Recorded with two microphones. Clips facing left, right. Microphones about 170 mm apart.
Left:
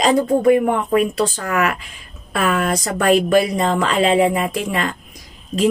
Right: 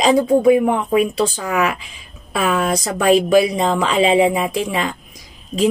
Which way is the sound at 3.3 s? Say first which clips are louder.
Right 1 dB; 10° right (ahead or behind).